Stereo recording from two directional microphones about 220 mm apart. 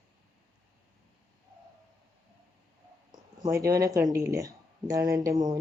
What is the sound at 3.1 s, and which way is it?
Speech, 15° right (ahead or behind).